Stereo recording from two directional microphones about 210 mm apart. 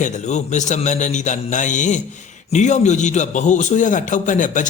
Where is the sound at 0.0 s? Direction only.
35° left (ahead or behind).